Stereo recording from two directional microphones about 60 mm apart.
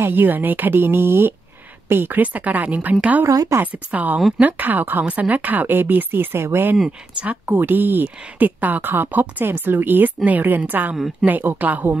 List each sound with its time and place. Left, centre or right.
0.0 s a woman's voice: right
3.3 s a woman's voice: right
3.6 s a woman's voice: right
6.3 s a woman's voice: right